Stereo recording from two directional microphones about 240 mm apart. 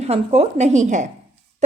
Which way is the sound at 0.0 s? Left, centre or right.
Right.